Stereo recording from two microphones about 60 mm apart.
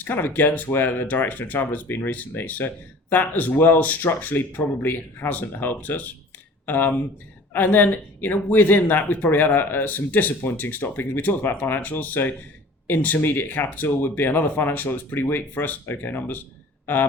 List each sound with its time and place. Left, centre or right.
0.0 s speech: left